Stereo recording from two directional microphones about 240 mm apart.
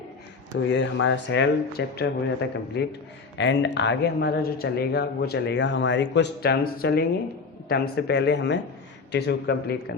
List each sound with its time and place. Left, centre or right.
0.5 s speech: left